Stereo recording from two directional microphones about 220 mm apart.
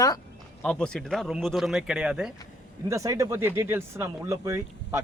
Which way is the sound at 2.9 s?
15° right (ahead or behind).